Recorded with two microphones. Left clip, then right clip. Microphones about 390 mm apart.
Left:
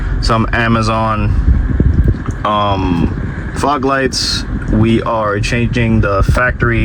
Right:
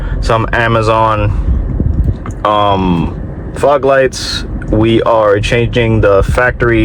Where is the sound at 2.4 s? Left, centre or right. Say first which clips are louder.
Right 4 dB; centre.